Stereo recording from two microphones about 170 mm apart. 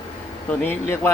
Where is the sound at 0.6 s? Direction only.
15° left (ahead or behind).